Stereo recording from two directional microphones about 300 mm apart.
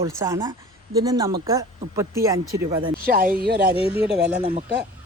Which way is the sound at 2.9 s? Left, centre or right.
Right.